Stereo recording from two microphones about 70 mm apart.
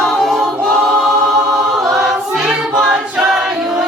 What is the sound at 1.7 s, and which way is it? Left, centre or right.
Choir, centre.